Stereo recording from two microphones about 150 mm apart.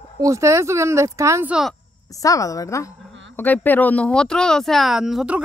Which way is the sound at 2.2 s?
20° left (ahead or behind).